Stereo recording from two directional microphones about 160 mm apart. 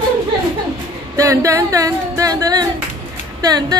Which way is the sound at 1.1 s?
20° right (ahead or behind).